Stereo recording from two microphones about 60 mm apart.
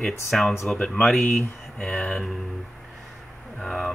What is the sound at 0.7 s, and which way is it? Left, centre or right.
Speech, centre.